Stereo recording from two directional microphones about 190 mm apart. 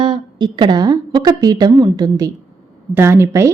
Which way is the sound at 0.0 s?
25° right (ahead or behind).